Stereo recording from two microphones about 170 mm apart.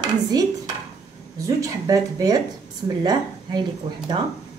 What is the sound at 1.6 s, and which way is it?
A woman's voice, 20° right (ahead or behind).